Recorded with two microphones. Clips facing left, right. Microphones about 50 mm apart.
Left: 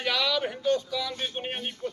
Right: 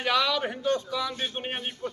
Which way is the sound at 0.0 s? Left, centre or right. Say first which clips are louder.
Right 2 dB; centre.